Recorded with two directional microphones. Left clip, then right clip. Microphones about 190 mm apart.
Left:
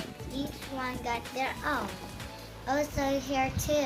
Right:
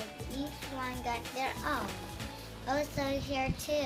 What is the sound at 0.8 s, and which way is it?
A child's voice, 20° left (ahead or behind).